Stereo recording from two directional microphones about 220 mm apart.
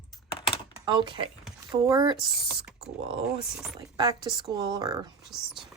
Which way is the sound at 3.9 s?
20° right (ahead or behind).